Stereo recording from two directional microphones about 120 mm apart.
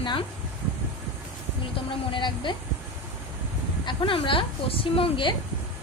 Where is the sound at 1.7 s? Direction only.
45° left (ahead or behind).